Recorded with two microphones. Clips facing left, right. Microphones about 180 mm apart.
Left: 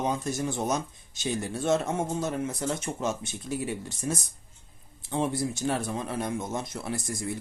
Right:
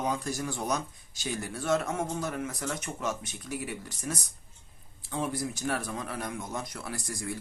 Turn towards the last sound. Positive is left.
turn(degrees=20)  # may be behind; listen again after turning